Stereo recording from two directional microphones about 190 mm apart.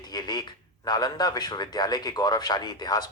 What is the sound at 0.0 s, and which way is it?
Speech, 20° left (ahead or behind).